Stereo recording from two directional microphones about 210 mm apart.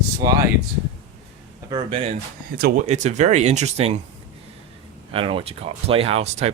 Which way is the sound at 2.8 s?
35° right (ahead or behind).